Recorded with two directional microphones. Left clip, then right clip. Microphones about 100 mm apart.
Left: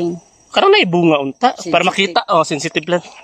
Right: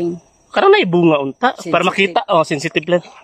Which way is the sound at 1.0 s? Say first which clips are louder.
Even; 40° right (ahead or behind).